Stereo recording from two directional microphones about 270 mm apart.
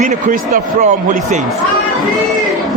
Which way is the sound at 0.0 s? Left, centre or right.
Right.